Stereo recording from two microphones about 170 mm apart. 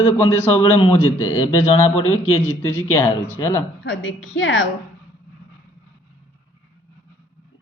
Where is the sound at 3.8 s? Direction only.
90° left.